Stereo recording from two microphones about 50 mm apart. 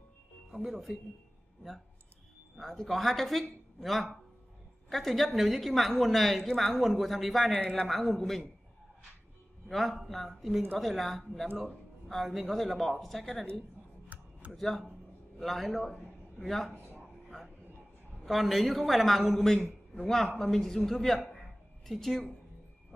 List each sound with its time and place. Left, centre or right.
0.5 s speech: centre
2.6 s speech: centre
7.5 s speech: left
7.8 s speech: centre
9.7 s speech: centre
14.0 s a sound: right
14.5 s speech: centre
18.2 s speech: centre